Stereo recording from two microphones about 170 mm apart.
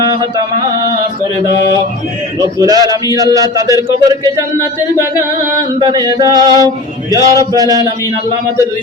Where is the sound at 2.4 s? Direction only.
20° right (ahead or behind).